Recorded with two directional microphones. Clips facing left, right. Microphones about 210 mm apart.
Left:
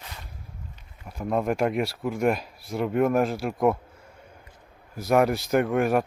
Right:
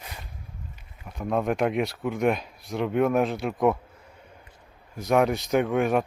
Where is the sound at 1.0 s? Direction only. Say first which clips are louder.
Even; centre (ahead or behind).